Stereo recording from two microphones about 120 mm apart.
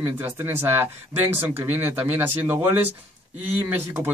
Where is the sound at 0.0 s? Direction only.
20° right (ahead or behind).